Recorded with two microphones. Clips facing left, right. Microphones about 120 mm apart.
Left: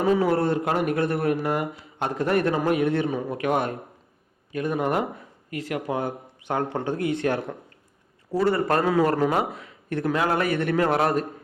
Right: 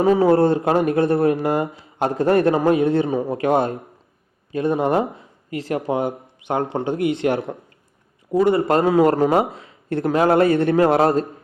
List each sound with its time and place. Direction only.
0.0 s speech: 30° right (ahead or behind)